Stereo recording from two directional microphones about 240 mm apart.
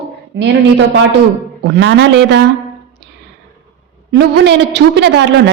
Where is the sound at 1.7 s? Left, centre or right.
Right.